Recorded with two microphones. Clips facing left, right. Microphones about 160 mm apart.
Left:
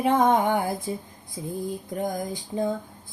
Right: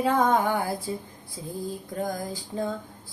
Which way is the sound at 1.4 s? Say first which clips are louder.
Left 4 dB; 15° left (ahead or behind).